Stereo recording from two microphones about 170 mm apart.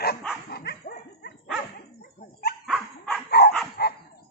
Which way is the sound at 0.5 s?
70° left (ahead or behind).